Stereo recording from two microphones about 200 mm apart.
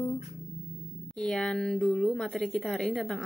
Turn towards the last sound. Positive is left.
turn(degrees=0)  # may be behind; listen again after turning